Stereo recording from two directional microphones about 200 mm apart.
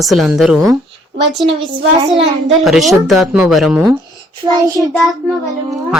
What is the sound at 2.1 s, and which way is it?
Speech, 30° right (ahead or behind).